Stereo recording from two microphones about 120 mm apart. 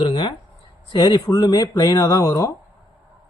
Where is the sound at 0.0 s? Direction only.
40° left (ahead or behind).